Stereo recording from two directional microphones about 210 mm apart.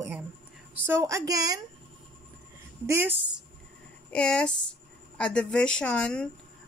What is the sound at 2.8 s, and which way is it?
Speech, 10° right (ahead or behind).